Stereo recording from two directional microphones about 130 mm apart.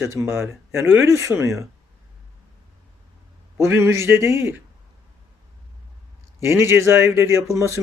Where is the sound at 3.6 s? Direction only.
20° right (ahead or behind).